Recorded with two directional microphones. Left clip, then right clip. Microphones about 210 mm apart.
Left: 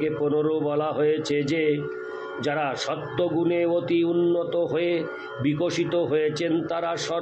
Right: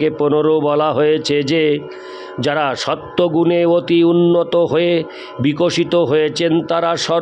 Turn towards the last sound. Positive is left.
turn(degrees=-55)  # may be behind; listen again after turning